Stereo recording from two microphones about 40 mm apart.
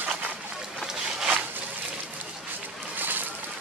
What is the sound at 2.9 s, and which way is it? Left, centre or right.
Vehicle, right.